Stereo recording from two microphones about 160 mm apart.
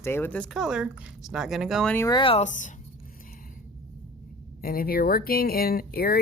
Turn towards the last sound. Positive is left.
turn(degrees=70)  # may be behind; listen again after turning